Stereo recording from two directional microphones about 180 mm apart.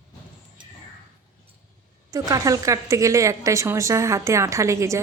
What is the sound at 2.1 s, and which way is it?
Speech, 20° right (ahead or behind).